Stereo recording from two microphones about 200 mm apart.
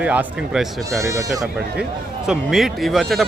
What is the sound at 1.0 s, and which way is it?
Speech, 15° right (ahead or behind).